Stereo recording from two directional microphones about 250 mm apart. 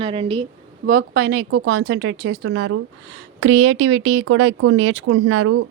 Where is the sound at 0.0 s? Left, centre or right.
Right.